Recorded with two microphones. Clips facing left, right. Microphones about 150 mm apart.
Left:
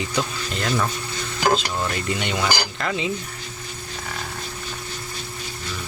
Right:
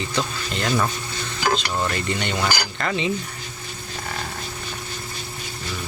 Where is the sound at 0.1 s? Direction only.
5° left (ahead or behind).